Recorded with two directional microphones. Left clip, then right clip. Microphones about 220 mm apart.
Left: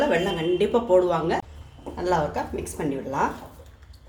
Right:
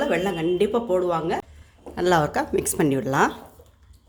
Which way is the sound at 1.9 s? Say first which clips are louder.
Right 4 dB; 40° right (ahead or behind).